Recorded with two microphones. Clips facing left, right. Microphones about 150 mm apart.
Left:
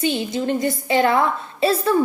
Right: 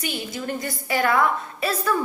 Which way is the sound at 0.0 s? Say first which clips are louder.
Left 8 dB; 25° left (ahead or behind).